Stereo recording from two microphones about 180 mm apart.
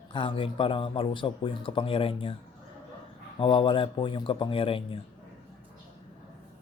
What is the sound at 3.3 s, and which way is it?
Speech, 30° left (ahead or behind).